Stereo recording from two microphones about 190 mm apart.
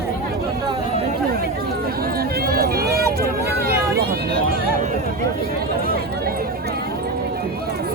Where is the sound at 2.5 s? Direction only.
50° right (ahead or behind).